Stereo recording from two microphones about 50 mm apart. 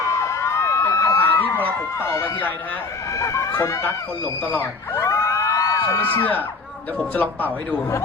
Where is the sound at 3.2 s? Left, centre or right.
Left.